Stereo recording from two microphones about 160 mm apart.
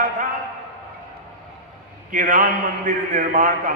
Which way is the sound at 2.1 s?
55° right (ahead or behind).